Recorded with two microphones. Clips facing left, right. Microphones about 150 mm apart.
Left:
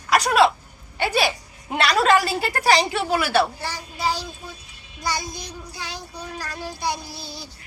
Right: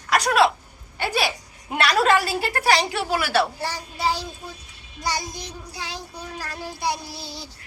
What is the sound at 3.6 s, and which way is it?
Speech, 35° right (ahead or behind).